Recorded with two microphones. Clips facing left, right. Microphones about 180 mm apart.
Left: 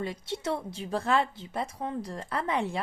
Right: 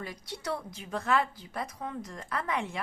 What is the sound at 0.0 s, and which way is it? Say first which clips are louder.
Speech: left 6 dB; 25° left (ahead or behind).